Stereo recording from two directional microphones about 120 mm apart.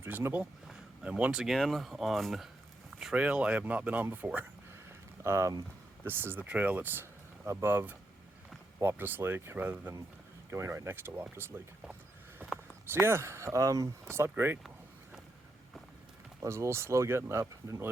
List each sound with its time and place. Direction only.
0.0 s speech: 20° right (ahead or behind)
12.4 s a sound: 15° right (ahead or behind)
12.8 s speech: 20° right (ahead or behind)
16.4 s speech: 25° right (ahead or behind)